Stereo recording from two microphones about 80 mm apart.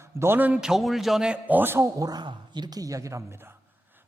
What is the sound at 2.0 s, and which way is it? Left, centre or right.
Speech, right.